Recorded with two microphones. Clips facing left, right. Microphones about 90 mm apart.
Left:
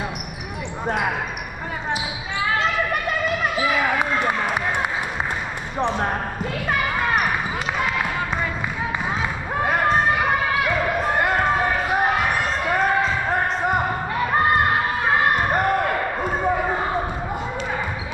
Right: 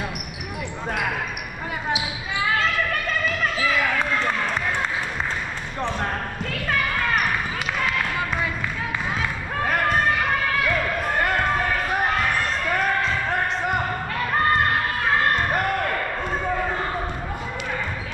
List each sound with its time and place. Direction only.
0.8 s basketball bounce: 20° left (ahead or behind)
2.5 s run: 15° left (ahead or behind)
5.9 s basketball bounce: 15° left (ahead or behind)
9.6 s a sound: 15° left (ahead or behind)
10.0 s basketball bounce: 15° left (ahead or behind)
13.0 s basketball bounce: 5° left (ahead or behind)
14.1 s crowd: 15° left (ahead or behind)